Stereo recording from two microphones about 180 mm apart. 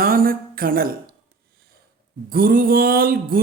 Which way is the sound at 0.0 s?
55° right (ahead or behind).